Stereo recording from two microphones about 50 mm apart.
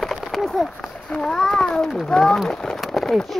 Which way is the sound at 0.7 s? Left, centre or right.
Centre.